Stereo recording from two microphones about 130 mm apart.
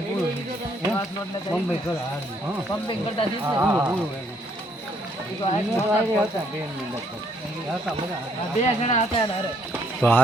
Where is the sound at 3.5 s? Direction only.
15° right (ahead or behind).